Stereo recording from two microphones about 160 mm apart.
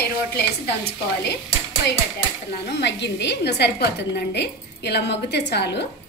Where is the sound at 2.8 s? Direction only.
90° left.